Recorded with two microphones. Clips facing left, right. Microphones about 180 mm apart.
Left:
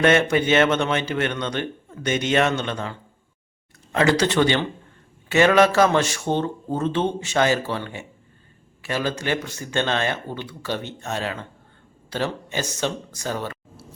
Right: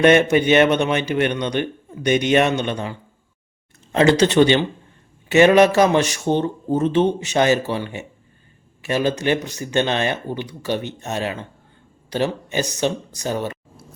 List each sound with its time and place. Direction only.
0.0 s a man's voice: 20° right (ahead or behind)